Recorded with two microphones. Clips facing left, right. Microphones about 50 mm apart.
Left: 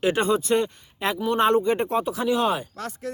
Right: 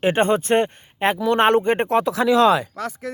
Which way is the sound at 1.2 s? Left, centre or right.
Right.